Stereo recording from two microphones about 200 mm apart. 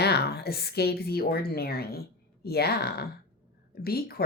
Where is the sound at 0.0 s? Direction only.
55° left (ahead or behind).